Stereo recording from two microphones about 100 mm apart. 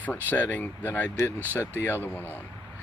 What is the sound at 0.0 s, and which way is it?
Speech, 15° left (ahead or behind).